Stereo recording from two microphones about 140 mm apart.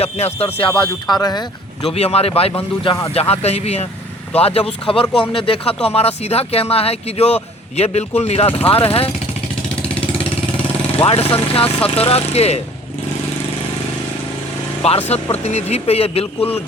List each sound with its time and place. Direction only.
0.0 s speech: 50° left (ahead or behind)
1.1 s speech: 30° left (ahead or behind)
1.8 s speech: 45° left (ahead or behind)
10.9 s speech: 45° left (ahead or behind)
14.8 s speech: 45° left (ahead or behind)